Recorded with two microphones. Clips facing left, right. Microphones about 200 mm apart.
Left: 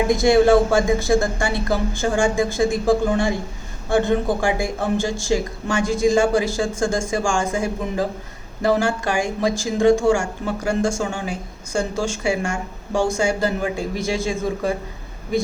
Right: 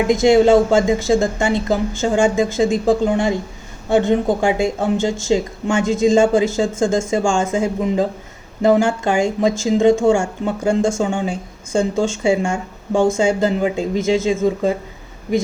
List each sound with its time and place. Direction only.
0.1 s speech: 20° right (ahead or behind)